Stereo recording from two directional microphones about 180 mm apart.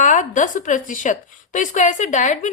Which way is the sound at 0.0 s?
45° left (ahead or behind).